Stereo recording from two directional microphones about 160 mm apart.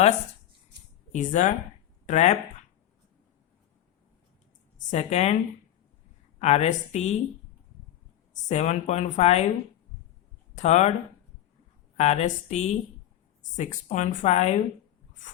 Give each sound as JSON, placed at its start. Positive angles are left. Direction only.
{"t": 1.1, "sound": "speech", "side_deg": 50}
{"t": 4.8, "sound": "speech", "side_deg": 45}
{"t": 6.4, "sound": "speech", "side_deg": 45}
{"t": 8.4, "sound": "speech", "side_deg": 45}
{"t": 10.5, "sound": "speech", "side_deg": 45}
{"t": 11.9, "sound": "speech", "side_deg": 45}